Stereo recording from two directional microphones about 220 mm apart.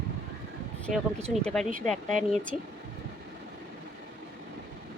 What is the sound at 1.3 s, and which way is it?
Speech, 5° left (ahead or behind).